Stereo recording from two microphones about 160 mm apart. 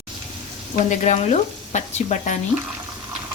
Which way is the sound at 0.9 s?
45° left (ahead or behind).